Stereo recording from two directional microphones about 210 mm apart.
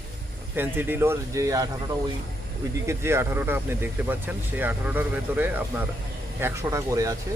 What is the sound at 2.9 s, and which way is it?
Speech, 10° right (ahead or behind).